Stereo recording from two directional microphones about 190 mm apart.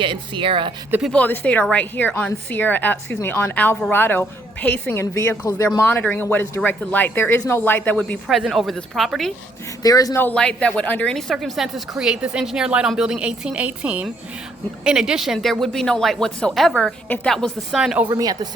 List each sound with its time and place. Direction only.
0.0 s speech: 25° right (ahead or behind)
0.9 s speech: 10° right (ahead or behind)
1.1 s a woman's voice: 10° left (ahead or behind)
9.8 s a woman's voice: 20° left (ahead or behind); by 18.1 s 5° right (ahead or behind)
18.1 s speech: 20° right (ahead or behind)